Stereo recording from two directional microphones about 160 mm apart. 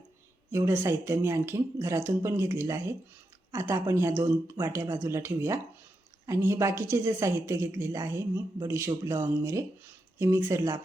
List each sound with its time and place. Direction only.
0.5 s a woman's voice: 15° right (ahead or behind)